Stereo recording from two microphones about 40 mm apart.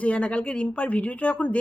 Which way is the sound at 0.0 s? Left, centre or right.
Left.